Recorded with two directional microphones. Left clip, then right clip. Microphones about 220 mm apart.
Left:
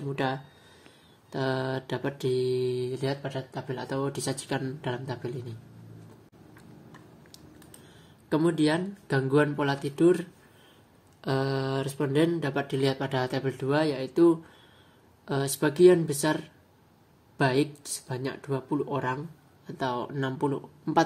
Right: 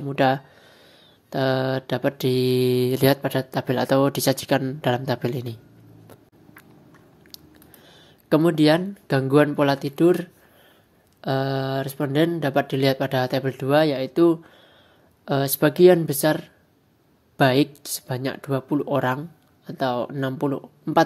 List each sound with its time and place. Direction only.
0.1 s speech: 30° right (ahead or behind); by 4.1 s 50° right (ahead or behind)
4.1 s speech: 35° right (ahead or behind)
8.3 s speech: 30° right (ahead or behind)